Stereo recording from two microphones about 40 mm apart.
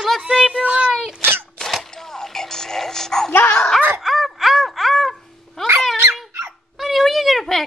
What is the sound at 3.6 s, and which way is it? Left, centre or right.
Snicker, centre.